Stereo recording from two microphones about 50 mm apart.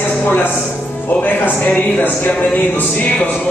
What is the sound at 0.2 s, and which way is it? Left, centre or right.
A man's voice, left.